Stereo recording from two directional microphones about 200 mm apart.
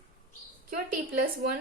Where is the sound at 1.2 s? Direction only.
50° right (ahead or behind).